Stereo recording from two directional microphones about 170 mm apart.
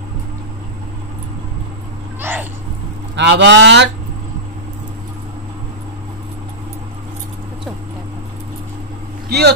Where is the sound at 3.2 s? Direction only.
90° right.